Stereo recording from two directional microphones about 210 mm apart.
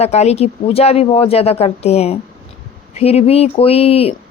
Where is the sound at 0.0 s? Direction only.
30° left (ahead or behind).